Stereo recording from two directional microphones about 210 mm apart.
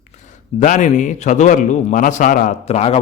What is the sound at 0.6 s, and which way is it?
A man's voice, 35° left (ahead or behind).